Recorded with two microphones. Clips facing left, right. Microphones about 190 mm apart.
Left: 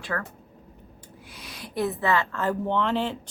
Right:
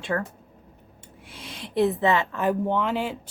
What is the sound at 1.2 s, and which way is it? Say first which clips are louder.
A woman's voice: right 3 dB; 25° right (ahead or behind).